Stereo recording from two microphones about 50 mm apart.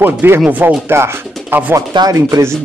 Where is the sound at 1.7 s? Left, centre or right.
Right.